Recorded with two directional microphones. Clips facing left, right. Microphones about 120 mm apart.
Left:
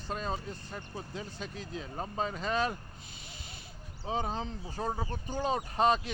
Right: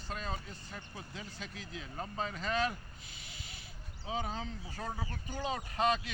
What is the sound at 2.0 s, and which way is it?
Speech, 25° left (ahead or behind).